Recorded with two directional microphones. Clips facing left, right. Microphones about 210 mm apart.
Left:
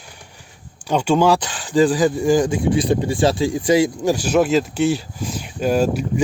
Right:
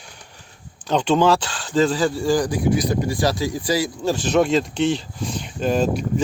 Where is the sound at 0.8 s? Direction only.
10° left (ahead or behind).